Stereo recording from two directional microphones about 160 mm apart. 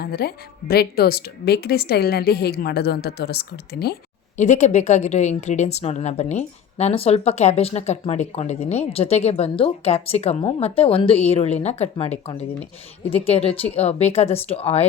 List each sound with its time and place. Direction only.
0.0 s a woman's voice: 75° left (ahead or behind)
4.4 s a woman's voice: 45° left (ahead or behind)